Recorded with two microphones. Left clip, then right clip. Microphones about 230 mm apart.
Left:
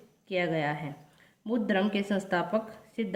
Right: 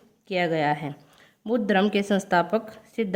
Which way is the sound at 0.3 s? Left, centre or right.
Right.